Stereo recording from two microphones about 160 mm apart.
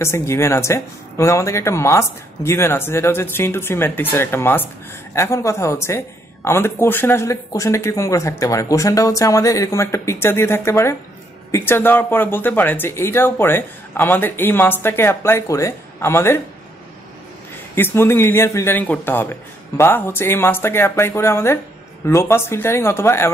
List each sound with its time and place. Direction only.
0.0 s speech: 15° left (ahead or behind)
17.7 s speech: 15° left (ahead or behind)